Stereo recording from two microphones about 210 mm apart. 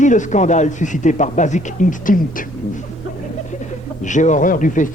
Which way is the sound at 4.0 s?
35° left (ahead or behind).